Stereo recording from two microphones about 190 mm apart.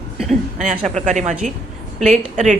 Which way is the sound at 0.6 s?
40° right (ahead or behind).